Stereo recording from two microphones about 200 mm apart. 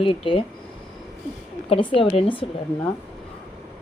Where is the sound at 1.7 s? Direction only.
25° left (ahead or behind).